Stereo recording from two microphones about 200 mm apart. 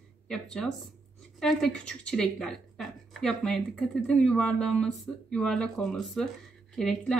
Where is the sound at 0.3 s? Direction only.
5° left (ahead or behind).